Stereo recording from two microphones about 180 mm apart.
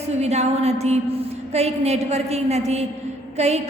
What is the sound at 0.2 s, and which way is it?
A woman's voice, 35° right (ahead or behind).